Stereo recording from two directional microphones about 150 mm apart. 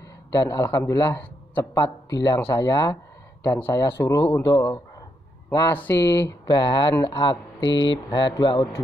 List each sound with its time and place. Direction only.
0.3 s speech: 25° left (ahead or behind)
5.7 s speech: 10° left (ahead or behind)
6.4 s speech: 30° left (ahead or behind)